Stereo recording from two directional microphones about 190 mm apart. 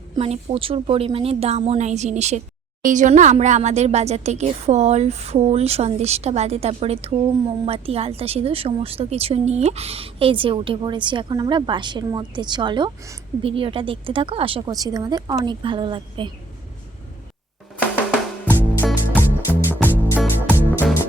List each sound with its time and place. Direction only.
0.2 s speech: 30° right (ahead or behind)
18.4 s music: 10° left (ahead or behind)
18.9 s music: 10° right (ahead or behind)
19.6 s music: 10° left (ahead or behind)
20.1 s music: 10° right (ahead or behind)